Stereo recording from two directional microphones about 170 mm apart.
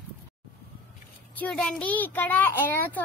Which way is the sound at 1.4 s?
5° left (ahead or behind).